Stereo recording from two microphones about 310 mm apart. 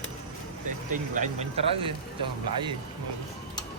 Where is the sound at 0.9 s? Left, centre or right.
Right.